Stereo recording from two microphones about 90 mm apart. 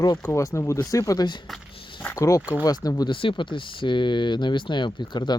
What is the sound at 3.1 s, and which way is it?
Speech, 70° left (ahead or behind).